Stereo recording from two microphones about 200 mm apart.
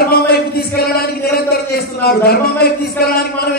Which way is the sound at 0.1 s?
50° left (ahead or behind).